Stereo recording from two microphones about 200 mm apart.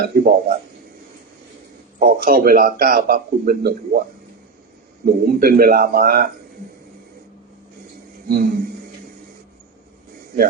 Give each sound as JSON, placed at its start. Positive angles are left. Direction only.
{"t": 0.1, "sound": "a man's voice", "side_deg": -45}
{"t": 2.0, "sound": "a man's voice", "side_deg": -45}
{"t": 5.0, "sound": "a man's voice", "side_deg": -50}
{"t": 8.3, "sound": "a man's voice", "side_deg": -45}